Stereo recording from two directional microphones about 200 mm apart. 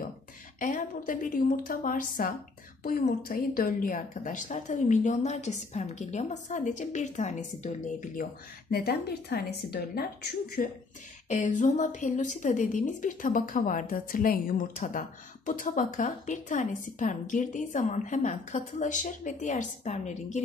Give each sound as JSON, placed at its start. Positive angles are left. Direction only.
{"t": 0.6, "sound": "a woman's voice", "side_deg": 40}
{"t": 11.2, "sound": "a woman's voice", "side_deg": 35}